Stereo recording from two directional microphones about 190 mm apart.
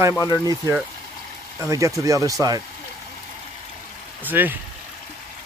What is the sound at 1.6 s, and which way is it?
Speech, 15° right (ahead or behind).